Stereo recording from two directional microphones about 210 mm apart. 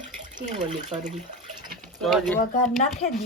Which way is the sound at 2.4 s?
35° left (ahead or behind).